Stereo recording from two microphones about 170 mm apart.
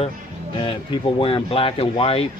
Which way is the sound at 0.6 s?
30° left (ahead or behind).